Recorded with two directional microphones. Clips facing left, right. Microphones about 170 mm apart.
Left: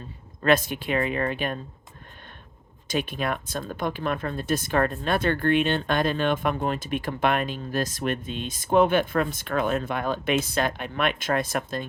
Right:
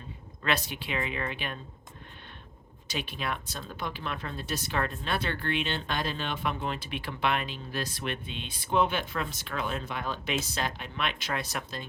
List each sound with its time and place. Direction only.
0.4 s speech: 50° left (ahead or behind)
2.8 s speech: 50° left (ahead or behind)